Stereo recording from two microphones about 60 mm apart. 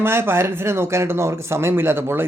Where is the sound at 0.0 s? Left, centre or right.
Right.